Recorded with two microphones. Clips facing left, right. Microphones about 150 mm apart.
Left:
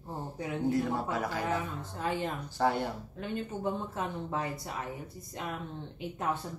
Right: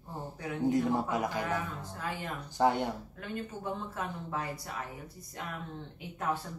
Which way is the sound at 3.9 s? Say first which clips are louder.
Left 2 dB; 25° left (ahead or behind).